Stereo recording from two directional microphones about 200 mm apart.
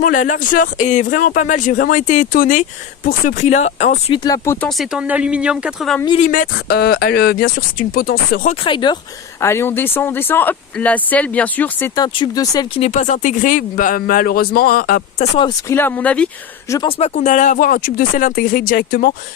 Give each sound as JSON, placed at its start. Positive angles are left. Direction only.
{"t": 0.0, "sound": "speech", "side_deg": 40}
{"t": 4.2, "sound": "speech", "side_deg": 20}
{"t": 4.6, "sound": "speech", "side_deg": -5}
{"t": 6.1, "sound": "speech", "side_deg": 40}
{"t": 8.6, "sound": "speech", "side_deg": 25}
{"t": 9.4, "sound": "speech", "side_deg": 10}
{"t": 11.9, "sound": "speech", "side_deg": 20}
{"t": 12.8, "sound": "speech", "side_deg": 40}
{"t": 15.7, "sound": "speech", "side_deg": 10}
{"t": 17.0, "sound": "speech", "side_deg": 35}